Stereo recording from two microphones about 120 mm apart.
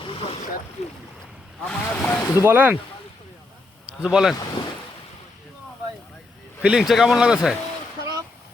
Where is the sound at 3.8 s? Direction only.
5° right (ahead or behind).